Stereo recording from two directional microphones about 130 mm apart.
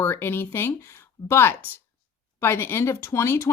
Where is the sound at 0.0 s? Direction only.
15° left (ahead or behind).